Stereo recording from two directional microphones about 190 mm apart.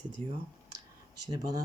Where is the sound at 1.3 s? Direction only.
20° right (ahead or behind).